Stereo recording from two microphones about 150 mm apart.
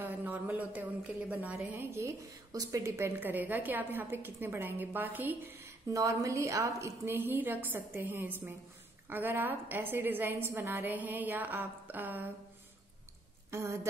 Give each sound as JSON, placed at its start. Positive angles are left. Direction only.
{"t": 0.0, "sound": "a woman's voice", "side_deg": -10}
{"t": 13.5, "sound": "a woman's voice", "side_deg": -20}